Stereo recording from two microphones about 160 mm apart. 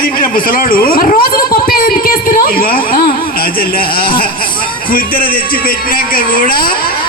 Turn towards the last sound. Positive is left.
turn(degrees=60)  # may be behind; listen again after turning